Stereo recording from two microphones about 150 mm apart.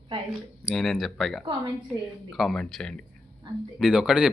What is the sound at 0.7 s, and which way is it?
A man's voice, centre (ahead or behind).